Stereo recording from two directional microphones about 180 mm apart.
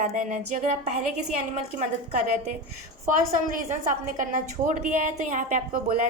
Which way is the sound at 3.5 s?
45° right (ahead or behind).